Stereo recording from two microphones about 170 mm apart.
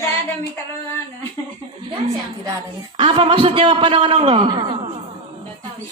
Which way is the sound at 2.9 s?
30° right (ahead or behind).